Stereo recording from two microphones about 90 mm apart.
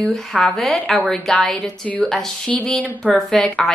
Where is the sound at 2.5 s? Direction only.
5° left (ahead or behind).